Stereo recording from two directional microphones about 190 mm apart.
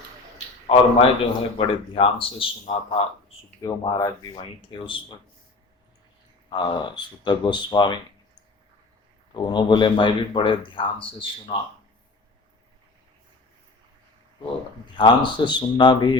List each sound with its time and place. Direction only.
0.7 s speech: 30° left (ahead or behind)
3.6 s speech: 20° left (ahead or behind)
6.5 s speech: 25° left (ahead or behind)
9.3 s speech: 25° left (ahead or behind)
14.9 s speech: 25° left (ahead or behind)